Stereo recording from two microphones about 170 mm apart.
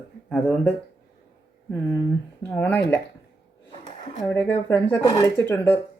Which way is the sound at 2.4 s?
10° left (ahead or behind).